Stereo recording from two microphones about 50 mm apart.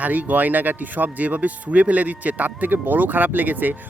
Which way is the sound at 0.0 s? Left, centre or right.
Right.